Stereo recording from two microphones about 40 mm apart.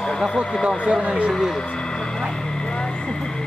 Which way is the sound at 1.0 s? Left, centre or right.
Right.